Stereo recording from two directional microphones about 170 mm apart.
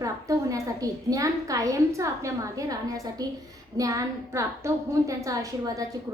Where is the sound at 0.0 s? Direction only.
20° right (ahead or behind).